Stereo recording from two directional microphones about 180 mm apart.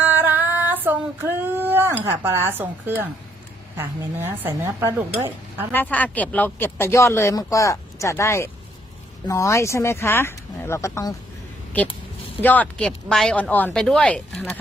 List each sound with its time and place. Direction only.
0.0 s female singing: 10° right (ahead or behind)
3.8 s speech: 15° right (ahead or behind)
5.7 s speech: 10° left (ahead or behind)
12.4 s speech: 10° left (ahead or behind)